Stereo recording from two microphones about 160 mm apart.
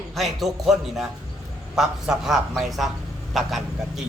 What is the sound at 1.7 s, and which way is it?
A man's voice, 5° right (ahead or behind).